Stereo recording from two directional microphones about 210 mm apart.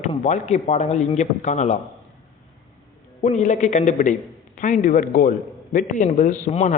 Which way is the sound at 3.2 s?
35° left (ahead or behind).